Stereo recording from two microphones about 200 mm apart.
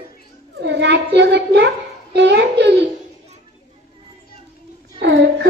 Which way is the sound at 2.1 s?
55° right (ahead or behind).